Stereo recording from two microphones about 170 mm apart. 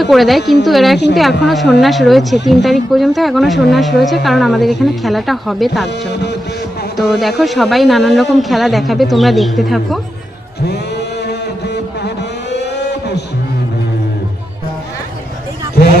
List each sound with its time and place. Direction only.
0.0 s speech: centre (ahead or behind)
6.9 s speech: centre (ahead or behind)
10.7 s a sound: 75° left (ahead or behind)